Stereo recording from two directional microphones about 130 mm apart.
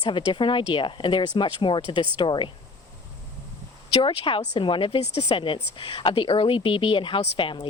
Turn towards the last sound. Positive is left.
turn(degrees=45)  # may be behind; listen again after turning